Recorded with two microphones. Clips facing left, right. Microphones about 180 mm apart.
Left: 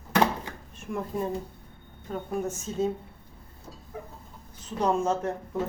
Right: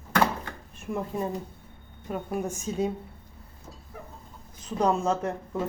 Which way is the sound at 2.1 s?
10° right (ahead or behind).